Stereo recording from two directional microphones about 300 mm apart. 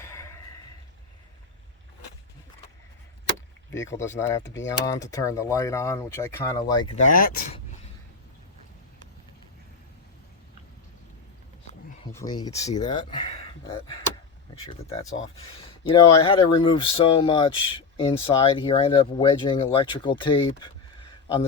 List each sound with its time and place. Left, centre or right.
0.0 s a sound: centre
3.8 s speech: centre
6.9 s speech: left
12.1 s speech: centre